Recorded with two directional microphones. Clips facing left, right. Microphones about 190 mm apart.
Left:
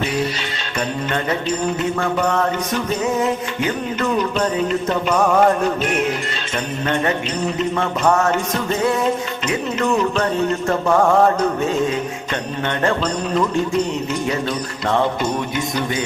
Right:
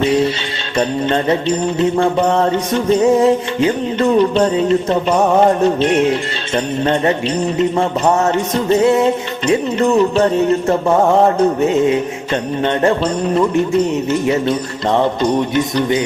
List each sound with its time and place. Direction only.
0.0 s music: 25° right (ahead or behind)